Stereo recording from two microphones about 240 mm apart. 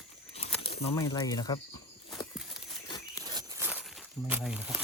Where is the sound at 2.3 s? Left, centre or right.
Centre.